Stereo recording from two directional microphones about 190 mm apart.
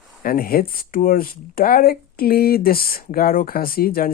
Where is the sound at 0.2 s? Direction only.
50° left (ahead or behind).